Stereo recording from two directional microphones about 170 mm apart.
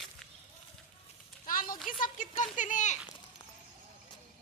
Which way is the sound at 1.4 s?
55° left (ahead or behind).